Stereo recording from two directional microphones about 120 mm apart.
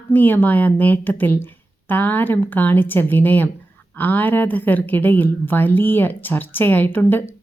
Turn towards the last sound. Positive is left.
turn(degrees=20)  # may be behind; listen again after turning